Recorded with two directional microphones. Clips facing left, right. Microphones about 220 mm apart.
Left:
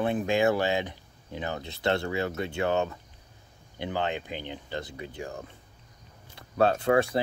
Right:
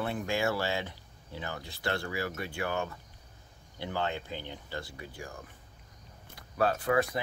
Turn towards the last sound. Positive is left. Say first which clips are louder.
# left 5 dB
turn(degrees=30)  # may be behind; listen again after turning